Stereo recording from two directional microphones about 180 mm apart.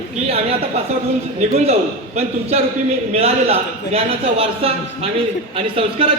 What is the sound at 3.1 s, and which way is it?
A man's voice, 35° right (ahead or behind).